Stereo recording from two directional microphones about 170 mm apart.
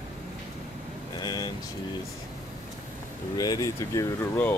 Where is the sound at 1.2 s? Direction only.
25° left (ahead or behind).